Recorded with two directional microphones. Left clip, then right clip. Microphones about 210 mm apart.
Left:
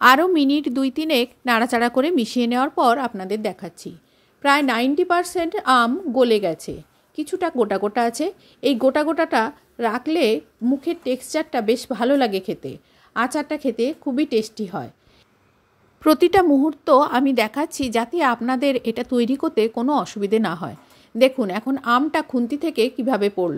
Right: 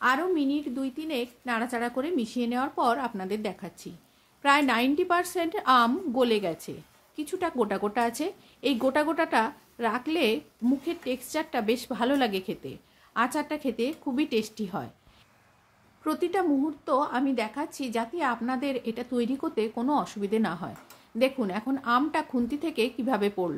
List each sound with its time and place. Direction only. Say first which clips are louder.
0.0 s a woman's voice: left 11 dB; 50° left (ahead or behind); by 14.9 s 25° left (ahead or behind)
16.0 s a woman's voice: left 12 dB; 45° left (ahead or behind); by 23.5 s 25° left (ahead or behind)